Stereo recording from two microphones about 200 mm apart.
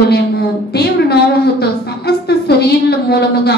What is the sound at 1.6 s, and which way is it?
A woman's voice, 55° left (ahead or behind).